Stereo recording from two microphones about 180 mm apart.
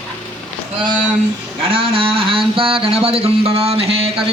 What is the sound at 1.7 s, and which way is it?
Speech, 30° right (ahead or behind).